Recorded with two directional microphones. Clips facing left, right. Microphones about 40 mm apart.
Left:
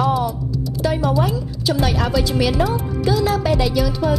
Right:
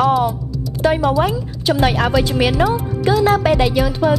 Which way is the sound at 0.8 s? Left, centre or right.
Right.